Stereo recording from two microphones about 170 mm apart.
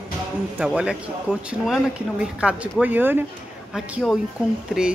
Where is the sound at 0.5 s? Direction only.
5° right (ahead or behind).